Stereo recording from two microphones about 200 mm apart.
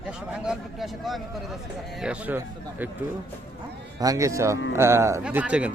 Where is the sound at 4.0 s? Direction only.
15° right (ahead or behind).